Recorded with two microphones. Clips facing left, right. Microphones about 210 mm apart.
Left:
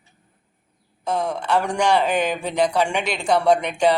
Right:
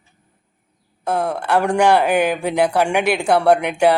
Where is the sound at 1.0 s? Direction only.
60° right (ahead or behind).